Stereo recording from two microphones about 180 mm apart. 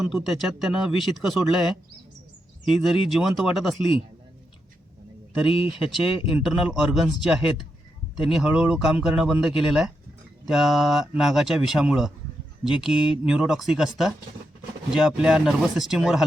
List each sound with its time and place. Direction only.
0.0 s speech: centre (ahead or behind)
5.8 s speech: 5° right (ahead or behind)